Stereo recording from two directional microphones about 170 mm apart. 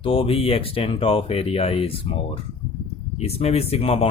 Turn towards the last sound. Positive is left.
turn(degrees=35)  # may be behind; listen again after turning